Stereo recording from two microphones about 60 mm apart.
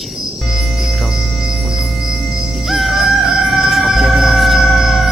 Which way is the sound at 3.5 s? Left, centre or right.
Centre.